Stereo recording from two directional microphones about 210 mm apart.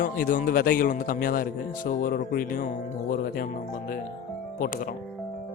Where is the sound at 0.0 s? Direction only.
40° left (ahead or behind).